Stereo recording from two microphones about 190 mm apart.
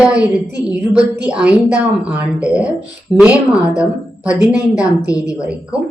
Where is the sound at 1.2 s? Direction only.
5° right (ahead or behind).